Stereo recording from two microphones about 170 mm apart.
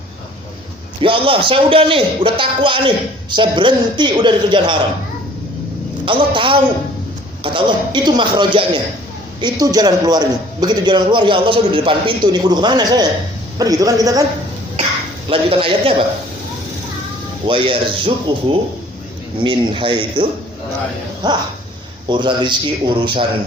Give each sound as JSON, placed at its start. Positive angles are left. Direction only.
{"t": 1.0, "sound": "a man's voice", "side_deg": -30}
{"t": 6.1, "sound": "a man's voice", "side_deg": -30}
{"t": 15.3, "sound": "a man's voice", "side_deg": -30}
{"t": 17.4, "sound": "a man's voice", "side_deg": -30}
{"t": 21.2, "sound": "a man's voice", "side_deg": -25}